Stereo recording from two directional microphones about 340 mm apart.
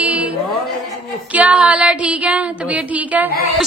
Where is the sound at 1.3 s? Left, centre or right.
Centre.